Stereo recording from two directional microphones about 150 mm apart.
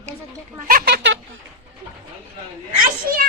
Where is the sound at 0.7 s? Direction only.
80° right.